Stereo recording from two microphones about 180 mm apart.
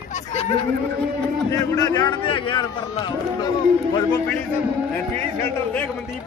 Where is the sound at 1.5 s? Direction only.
20° left (ahead or behind).